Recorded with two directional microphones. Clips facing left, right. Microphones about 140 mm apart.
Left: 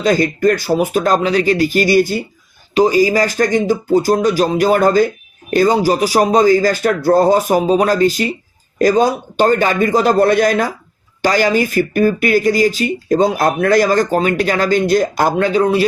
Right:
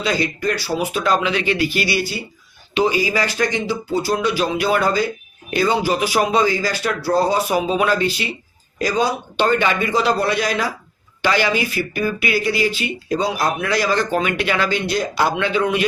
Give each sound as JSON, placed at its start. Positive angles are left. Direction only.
{"t": 0.0, "sound": "speech", "side_deg": 45}